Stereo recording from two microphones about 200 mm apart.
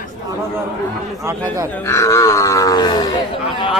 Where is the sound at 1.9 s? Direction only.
15° left (ahead or behind).